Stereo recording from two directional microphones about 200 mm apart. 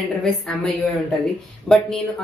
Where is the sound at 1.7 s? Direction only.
5° left (ahead or behind).